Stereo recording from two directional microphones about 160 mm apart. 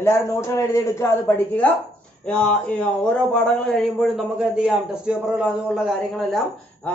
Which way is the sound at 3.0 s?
5° left (ahead or behind).